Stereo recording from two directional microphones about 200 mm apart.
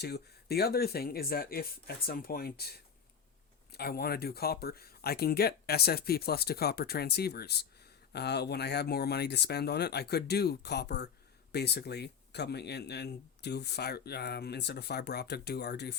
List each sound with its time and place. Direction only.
0.0 s speech: 50° left (ahead or behind)